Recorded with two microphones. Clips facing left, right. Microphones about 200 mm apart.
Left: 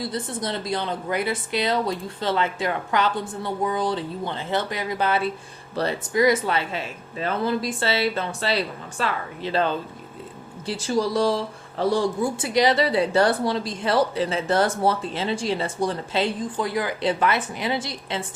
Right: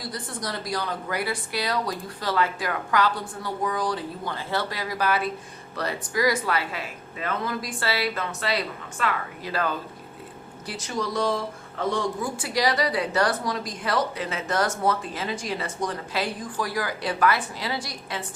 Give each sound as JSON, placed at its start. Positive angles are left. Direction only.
{"t": 0.0, "sound": "speech", "side_deg": 25}